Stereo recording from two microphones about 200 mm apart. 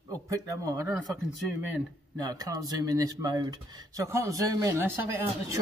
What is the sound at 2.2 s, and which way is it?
A man's voice, 20° right (ahead or behind).